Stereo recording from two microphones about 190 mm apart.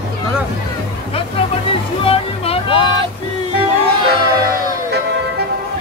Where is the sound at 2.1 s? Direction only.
30° left (ahead or behind).